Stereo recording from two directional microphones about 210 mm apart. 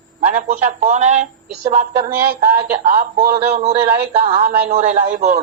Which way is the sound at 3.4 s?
30° right (ahead or behind).